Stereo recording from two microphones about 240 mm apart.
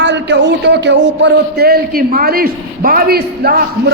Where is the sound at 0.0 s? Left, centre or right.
Right.